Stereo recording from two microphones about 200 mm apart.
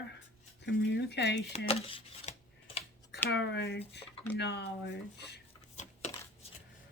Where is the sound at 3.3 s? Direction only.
60° left (ahead or behind).